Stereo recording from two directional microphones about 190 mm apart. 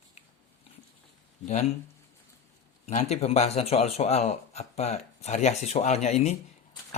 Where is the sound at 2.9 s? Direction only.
35° left (ahead or behind).